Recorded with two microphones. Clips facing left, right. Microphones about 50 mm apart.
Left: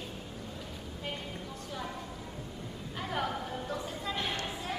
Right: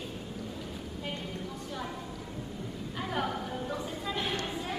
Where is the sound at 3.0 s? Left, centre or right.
Centre.